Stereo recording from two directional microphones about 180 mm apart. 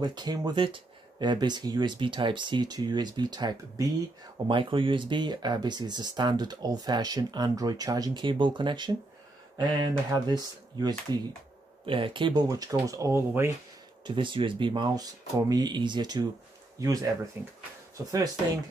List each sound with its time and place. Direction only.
0.0 s speech: 25° right (ahead or behind)
14.0 s speech: 30° right (ahead or behind)